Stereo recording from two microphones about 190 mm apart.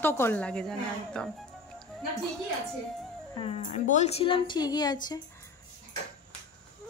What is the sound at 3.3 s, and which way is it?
A woman's voice, 30° left (ahead or behind).